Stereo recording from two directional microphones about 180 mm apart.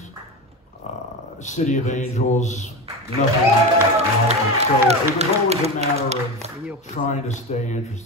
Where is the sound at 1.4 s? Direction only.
40° left (ahead or behind).